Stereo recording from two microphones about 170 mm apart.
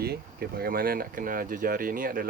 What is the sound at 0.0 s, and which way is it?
Speech, 65° right (ahead or behind).